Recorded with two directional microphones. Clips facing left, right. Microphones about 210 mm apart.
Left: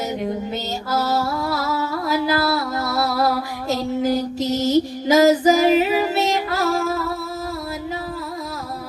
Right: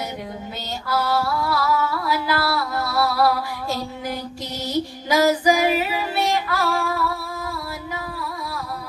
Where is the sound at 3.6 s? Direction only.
20° left (ahead or behind).